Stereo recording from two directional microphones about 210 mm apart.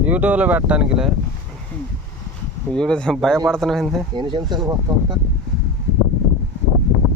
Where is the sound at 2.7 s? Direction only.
5° left (ahead or behind).